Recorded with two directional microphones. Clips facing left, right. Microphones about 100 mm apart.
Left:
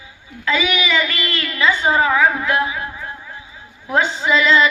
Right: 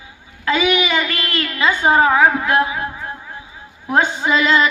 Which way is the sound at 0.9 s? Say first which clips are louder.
Even; 50° right (ahead or behind).